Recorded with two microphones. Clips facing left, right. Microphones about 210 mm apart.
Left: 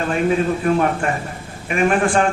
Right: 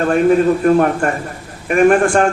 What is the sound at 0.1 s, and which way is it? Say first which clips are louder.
A man's voice: right 6 dB; 50° right (ahead or behind).